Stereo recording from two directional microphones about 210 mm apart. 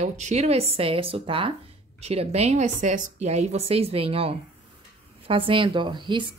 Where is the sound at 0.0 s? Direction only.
30° right (ahead or behind).